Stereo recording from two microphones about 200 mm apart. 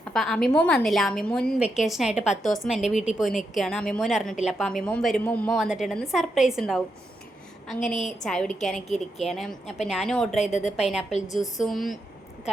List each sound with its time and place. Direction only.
0.1 s a woman's voice: centre (ahead or behind)
7.9 s a woman's voice: centre (ahead or behind)
10.3 s a woman's voice: 35° left (ahead or behind)
11.3 s a woman's voice: centre (ahead or behind)